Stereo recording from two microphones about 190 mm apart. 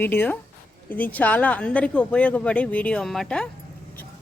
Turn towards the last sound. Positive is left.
turn(degrees=5)  # may be behind; listen again after turning